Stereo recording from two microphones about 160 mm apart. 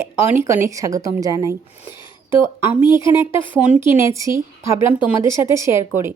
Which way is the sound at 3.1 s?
15° right (ahead or behind).